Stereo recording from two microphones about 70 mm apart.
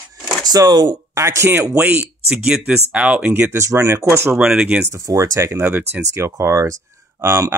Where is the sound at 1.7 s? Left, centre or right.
Right.